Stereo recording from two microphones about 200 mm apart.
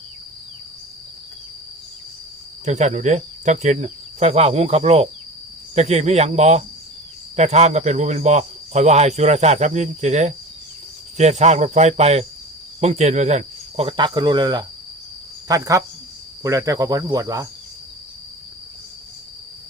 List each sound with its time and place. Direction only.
2.6 s cricket: 35° right (ahead or behind)
12.8 s speech: 35° right (ahead or behind); by 17.5 s 15° right (ahead or behind)